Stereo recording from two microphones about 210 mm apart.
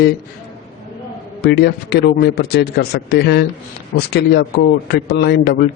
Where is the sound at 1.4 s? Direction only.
50° left (ahead or behind).